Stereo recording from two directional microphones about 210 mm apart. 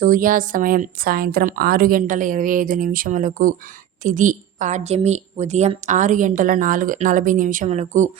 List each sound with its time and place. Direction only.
0.0 s a woman's voice: 40° right (ahead or behind)